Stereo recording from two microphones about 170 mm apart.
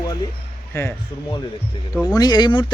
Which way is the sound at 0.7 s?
15° left (ahead or behind).